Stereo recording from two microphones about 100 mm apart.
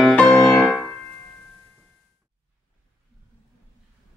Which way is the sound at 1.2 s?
20° left (ahead or behind).